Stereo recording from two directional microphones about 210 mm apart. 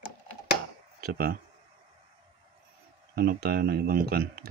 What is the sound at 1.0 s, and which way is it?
Speech, 45° right (ahead or behind).